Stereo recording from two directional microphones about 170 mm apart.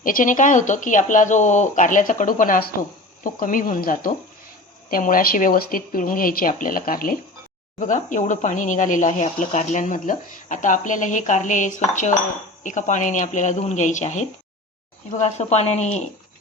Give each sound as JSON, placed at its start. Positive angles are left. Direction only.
{"t": 0.0, "sound": "speech", "side_deg": 50}